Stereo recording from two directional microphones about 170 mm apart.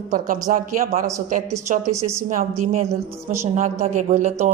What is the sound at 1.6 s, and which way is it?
Speech, 45° right (ahead or behind).